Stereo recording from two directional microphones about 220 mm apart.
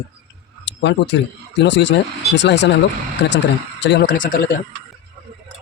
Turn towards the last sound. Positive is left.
turn(degrees=40)  # may be behind; listen again after turning